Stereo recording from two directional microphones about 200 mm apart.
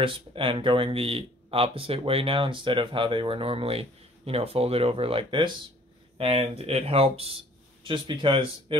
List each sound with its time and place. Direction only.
0.0 s speech: 25° right (ahead or behind)